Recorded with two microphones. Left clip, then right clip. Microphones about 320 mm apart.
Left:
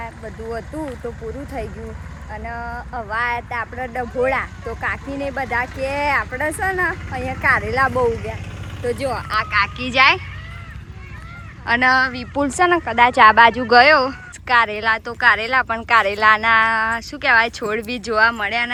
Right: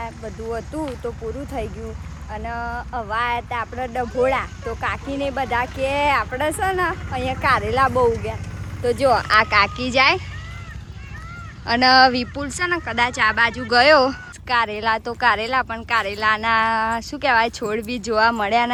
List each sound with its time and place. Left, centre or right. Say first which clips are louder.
1.0 s speech: right 1 dB; centre
8.8 s speech: right 5 dB; centre
9.1 s speech: right 5 dB; right
9.5 s speech: right 1 dB; centre
11.6 s speech: right 2 dB; centre
12.3 s speech: left 7 dB; centre